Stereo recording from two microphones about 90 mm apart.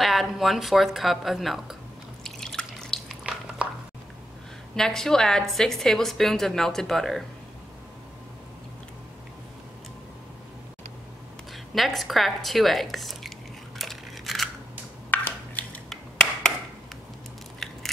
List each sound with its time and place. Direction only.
0.0 s a woman's voice: centre (ahead or behind)
2.2 s drip: 5° left (ahead or behind)
3.1 s squish: 10° right (ahead or behind)
4.7 s a woman's voice: 5° left (ahead or behind)
11.5 s a woman's voice: centre (ahead or behind)
13.7 s a sound: centre (ahead or behind)
15.0 s a sound: 20° left (ahead or behind)
15.9 s a sound: 10° left (ahead or behind)
17.6 s scissors: 5° left (ahead or behind)